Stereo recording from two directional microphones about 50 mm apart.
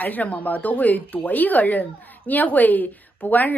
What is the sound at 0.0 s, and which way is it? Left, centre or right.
Speech, left.